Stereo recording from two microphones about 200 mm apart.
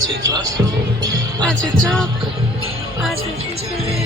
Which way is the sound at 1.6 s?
5° left (ahead or behind).